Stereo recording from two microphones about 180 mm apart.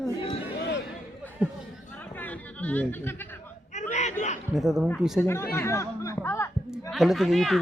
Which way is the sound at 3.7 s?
40° left (ahead or behind).